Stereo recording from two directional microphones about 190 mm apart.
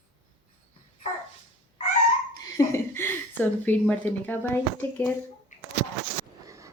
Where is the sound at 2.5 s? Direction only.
15° left (ahead or behind).